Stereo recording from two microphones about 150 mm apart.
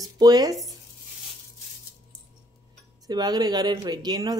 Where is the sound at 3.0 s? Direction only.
25° right (ahead or behind).